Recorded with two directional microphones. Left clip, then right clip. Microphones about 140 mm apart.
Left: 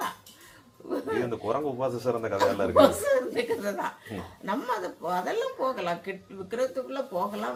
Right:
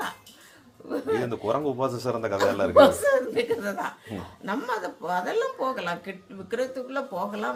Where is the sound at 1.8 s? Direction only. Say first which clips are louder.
Right 1 dB; 70° right (ahead or behind).